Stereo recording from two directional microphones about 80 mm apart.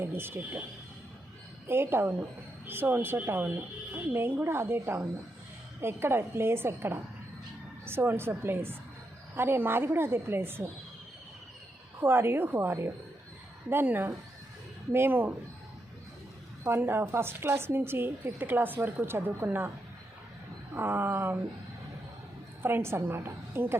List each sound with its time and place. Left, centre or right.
0.0 s speech: right
1.6 s a woman's voice: right
11.9 s speech: right
16.6 s speech: right
20.7 s speech: right
22.6 s a woman's voice: right